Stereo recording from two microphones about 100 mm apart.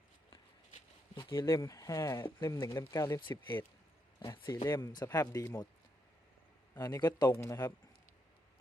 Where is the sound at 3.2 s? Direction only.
55° left (ahead or behind).